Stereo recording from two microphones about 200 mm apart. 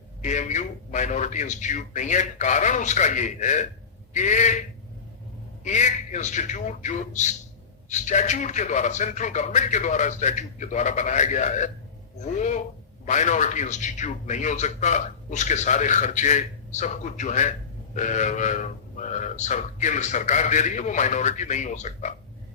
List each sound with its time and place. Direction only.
0.2 s a man's voice: 35° left (ahead or behind)
5.6 s a man's voice: 35° left (ahead or behind)